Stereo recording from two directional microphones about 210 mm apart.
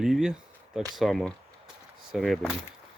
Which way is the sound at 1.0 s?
Centre (ahead or behind).